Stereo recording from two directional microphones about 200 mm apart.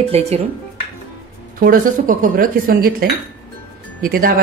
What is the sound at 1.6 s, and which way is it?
Speech, 45° right (ahead or behind).